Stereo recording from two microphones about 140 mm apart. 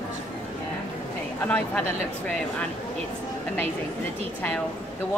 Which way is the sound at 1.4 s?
10° left (ahead or behind).